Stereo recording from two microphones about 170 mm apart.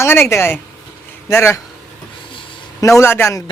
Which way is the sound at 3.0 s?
15° left (ahead or behind).